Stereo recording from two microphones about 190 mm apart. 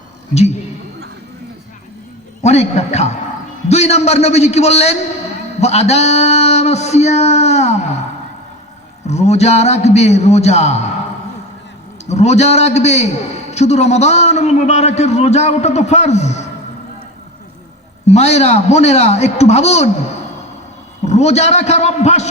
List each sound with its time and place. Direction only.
2.4 s a man's voice: 35° left (ahead or behind)
9.0 s a man's voice: 35° left (ahead or behind)
12.0 s a man's voice: 35° left (ahead or behind)
18.0 s a man's voice: 35° left (ahead or behind)
21.0 s a man's voice: 35° left (ahead or behind)